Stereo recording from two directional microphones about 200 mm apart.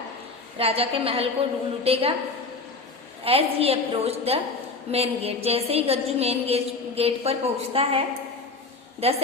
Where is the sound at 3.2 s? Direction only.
30° right (ahead or behind).